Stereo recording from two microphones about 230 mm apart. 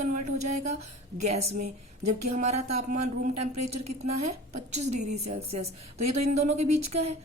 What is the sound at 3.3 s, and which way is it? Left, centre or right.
A woman's voice, right.